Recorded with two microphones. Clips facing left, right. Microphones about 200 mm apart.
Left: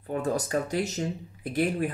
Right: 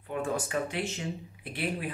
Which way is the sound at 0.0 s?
40° left (ahead or behind).